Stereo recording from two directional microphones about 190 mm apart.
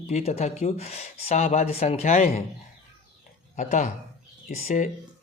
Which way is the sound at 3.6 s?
35° left (ahead or behind).